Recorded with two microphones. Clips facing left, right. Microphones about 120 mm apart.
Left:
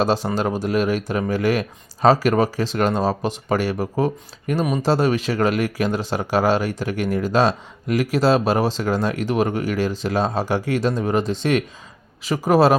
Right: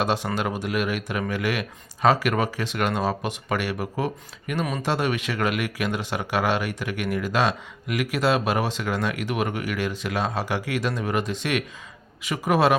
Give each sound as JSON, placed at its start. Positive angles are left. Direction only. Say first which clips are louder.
{"t": 0.0, "sound": "speech", "louder": "left 5 dB", "side_deg": 30}